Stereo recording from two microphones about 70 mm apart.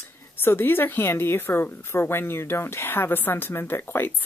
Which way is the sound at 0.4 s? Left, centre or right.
Left.